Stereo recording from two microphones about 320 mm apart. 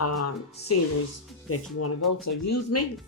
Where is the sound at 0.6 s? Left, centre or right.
Left.